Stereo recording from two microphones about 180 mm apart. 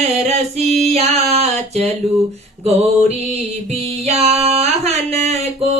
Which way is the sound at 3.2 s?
35° right (ahead or behind).